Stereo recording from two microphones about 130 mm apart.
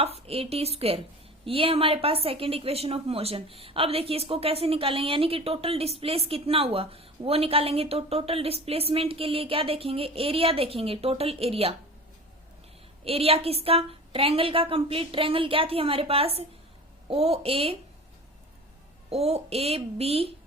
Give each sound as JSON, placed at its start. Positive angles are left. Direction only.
{"t": 0.0, "sound": "a woman's voice", "side_deg": -50}
{"t": 13.1, "sound": "a woman's voice", "side_deg": -50}
{"t": 19.1, "sound": "a woman's voice", "side_deg": -50}